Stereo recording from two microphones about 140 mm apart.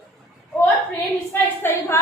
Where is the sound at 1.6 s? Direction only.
15° left (ahead or behind).